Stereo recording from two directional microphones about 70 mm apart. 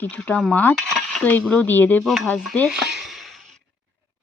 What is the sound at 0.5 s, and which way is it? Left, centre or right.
Speech, left.